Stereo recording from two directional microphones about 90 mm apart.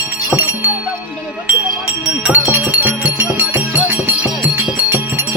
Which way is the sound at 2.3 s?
20° right (ahead or behind).